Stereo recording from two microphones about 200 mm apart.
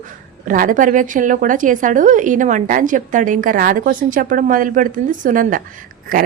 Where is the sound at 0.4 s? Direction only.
40° right (ahead or behind).